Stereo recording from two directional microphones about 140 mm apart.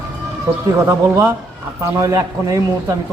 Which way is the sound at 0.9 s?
20° right (ahead or behind).